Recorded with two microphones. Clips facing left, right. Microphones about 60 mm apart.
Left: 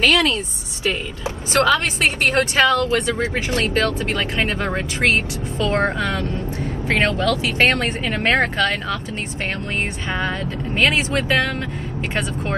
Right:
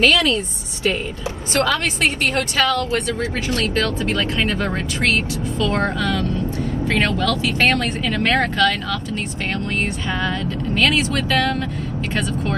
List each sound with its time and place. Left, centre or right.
0.0 s speech: left
1.5 s speech: left
7.4 s speech: left
10.2 s speech: left